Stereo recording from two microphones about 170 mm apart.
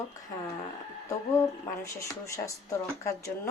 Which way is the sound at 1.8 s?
15° left (ahead or behind).